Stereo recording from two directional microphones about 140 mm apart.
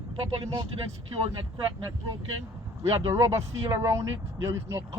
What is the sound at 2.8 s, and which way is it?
Speech, 20° right (ahead or behind).